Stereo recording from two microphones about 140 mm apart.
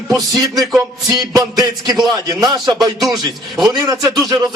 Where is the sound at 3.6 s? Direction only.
30° right (ahead or behind).